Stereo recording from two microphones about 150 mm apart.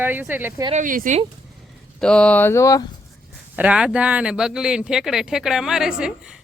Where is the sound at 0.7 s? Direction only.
65° right (ahead or behind).